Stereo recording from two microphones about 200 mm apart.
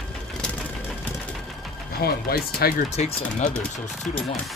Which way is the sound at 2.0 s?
50° left (ahead or behind).